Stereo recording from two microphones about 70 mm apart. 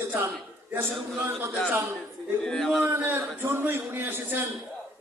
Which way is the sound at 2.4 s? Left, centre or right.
Centre.